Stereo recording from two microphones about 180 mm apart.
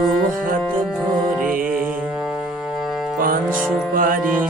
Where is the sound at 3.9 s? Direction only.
50° right (ahead or behind).